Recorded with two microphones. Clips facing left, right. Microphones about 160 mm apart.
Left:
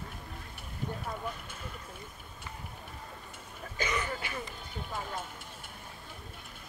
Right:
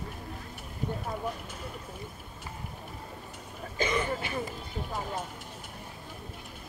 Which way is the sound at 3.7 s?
30° right (ahead or behind).